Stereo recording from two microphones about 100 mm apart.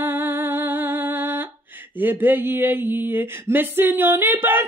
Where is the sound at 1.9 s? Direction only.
20° right (ahead or behind).